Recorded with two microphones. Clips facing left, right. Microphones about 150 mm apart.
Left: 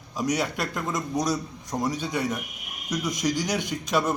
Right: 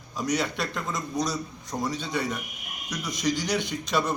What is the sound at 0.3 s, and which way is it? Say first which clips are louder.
A man's voice: left 1 dB; 10° left (ahead or behind).